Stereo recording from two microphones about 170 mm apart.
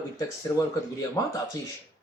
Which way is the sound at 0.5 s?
20° left (ahead or behind).